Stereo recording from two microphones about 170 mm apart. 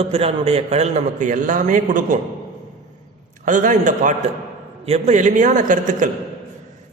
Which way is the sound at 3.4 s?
50° right (ahead or behind).